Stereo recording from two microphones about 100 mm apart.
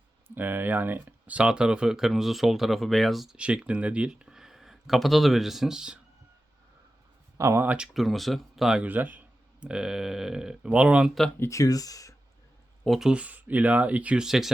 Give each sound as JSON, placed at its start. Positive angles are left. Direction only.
{"t": 0.3, "sound": "speech", "side_deg": -20}
{"t": 7.3, "sound": "speech", "side_deg": -30}
{"t": 7.6, "sound": "speech", "side_deg": -15}
{"t": 7.9, "sound": "speech", "side_deg": 0}
{"t": 8.9, "sound": "speech", "side_deg": -15}
{"t": 11.3, "sound": "speech", "side_deg": 30}
{"t": 12.8, "sound": "speech", "side_deg": 0}